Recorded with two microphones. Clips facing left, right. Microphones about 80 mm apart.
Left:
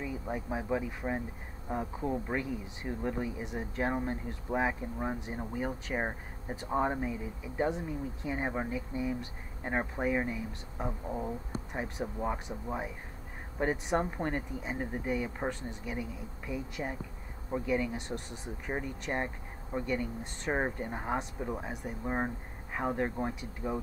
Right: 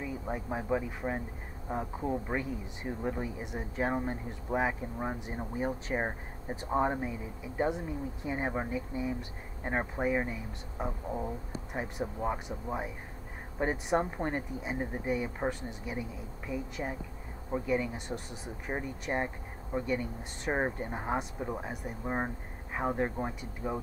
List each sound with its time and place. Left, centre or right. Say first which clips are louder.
0.0 s speech: even; centre
5.5 s speech: right 3 dB; centre
5.9 s speech: right 1 dB; centre